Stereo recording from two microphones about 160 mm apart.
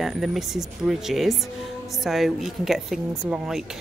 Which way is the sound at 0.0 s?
Centre (ahead or behind).